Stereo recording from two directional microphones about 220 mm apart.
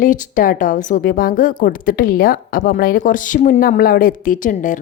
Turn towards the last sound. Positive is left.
turn(degrees=35)  # may be behind; listen again after turning